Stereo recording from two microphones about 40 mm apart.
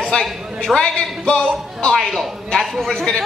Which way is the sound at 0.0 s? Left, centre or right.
Centre.